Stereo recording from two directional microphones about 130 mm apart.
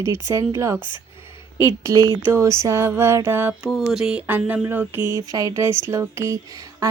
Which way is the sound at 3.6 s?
5° right (ahead or behind).